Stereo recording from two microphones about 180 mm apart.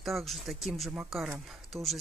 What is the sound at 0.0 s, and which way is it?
Speech, centre (ahead or behind).